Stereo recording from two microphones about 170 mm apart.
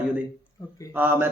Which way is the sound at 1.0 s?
10° right (ahead or behind).